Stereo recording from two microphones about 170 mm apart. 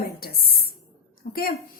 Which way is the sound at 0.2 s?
65° left (ahead or behind).